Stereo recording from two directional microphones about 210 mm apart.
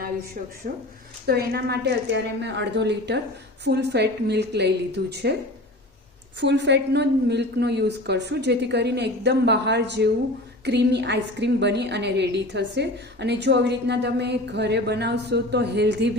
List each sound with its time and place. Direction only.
1.3 s a woman's voice: 50° right (ahead or behind)
6.4 s a woman's voice: 55° right (ahead or behind)